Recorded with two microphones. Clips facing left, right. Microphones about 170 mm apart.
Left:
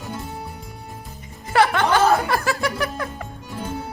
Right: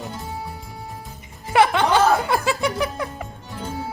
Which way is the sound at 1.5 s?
20° right (ahead or behind).